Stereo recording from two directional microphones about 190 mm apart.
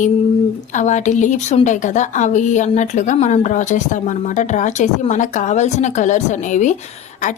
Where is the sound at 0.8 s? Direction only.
40° left (ahead or behind).